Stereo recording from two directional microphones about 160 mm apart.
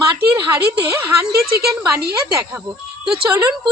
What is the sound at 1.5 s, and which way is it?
Speech, 80° right.